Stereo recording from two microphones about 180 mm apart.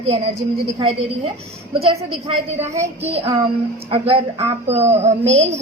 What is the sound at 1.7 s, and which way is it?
A woman's voice, 30° right (ahead or behind).